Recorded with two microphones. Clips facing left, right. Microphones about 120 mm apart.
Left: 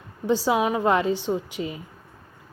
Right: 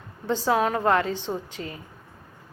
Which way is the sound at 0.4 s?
10° left (ahead or behind).